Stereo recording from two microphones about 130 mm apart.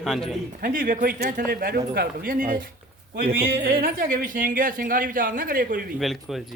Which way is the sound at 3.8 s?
90° right.